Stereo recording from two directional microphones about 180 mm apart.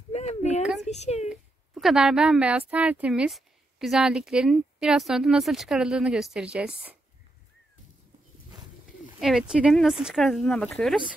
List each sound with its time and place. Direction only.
0.1 s a sound: 35° left (ahead or behind)
1.3 s a woman's voice: centre (ahead or behind)
9.2 s a woman's voice: centre (ahead or behind)